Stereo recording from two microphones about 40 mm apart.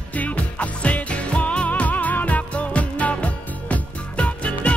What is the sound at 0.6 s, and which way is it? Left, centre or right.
Music, left.